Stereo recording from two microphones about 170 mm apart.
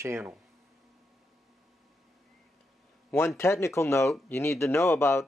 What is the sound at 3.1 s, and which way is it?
Speech, 15° left (ahead or behind).